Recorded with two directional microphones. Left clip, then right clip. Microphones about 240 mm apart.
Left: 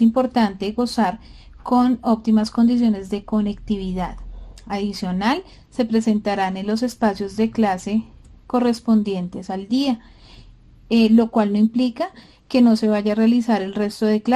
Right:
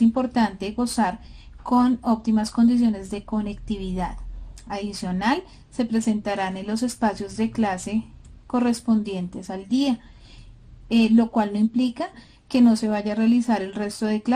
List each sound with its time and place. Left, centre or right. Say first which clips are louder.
0.1 s a woman's voice: left 4 dB; left